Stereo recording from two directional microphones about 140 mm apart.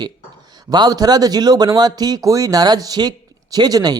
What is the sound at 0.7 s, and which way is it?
Speech, 30° right (ahead or behind).